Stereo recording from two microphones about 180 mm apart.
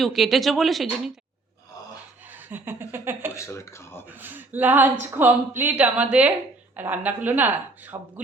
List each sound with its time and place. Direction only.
0.0 s speech: centre (ahead or behind)
2.3 s chuckle: 10° right (ahead or behind)
3.3 s speech: 15° left (ahead or behind)
4.1 s speech: 10° right (ahead or behind)